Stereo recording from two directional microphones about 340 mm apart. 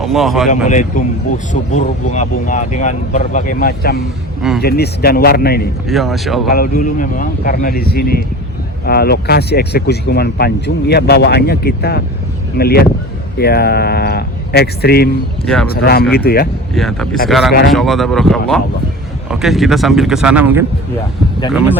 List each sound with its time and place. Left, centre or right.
0.0 s speech: centre
0.4 s speech: left
5.9 s speech: centre
6.5 s speech: left
16.7 s speech: centre